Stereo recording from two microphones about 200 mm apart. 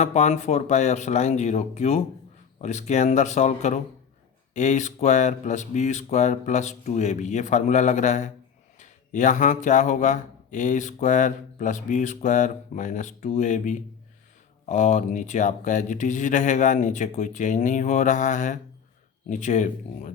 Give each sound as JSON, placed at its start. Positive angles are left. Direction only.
{"t": 0.0, "sound": "speech", "side_deg": 35}